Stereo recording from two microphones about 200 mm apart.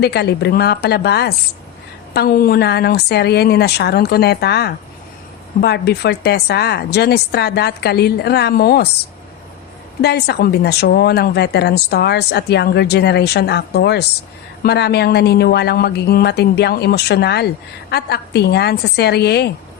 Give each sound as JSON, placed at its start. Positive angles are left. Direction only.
{"t": 0.0, "sound": "a woman's voice", "side_deg": 55}
{"t": 10.0, "sound": "speech", "side_deg": 55}